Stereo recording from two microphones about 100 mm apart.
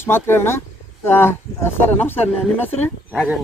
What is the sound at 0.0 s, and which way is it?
Speech, 25° left (ahead or behind).